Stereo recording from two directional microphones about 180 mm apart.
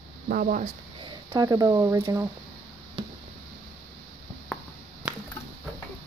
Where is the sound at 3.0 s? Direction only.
30° right (ahead or behind).